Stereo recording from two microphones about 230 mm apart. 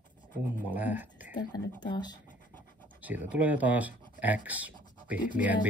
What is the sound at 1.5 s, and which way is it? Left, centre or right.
Speech, centre.